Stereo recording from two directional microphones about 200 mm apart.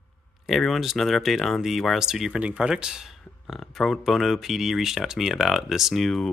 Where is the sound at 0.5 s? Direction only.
Centre (ahead or behind).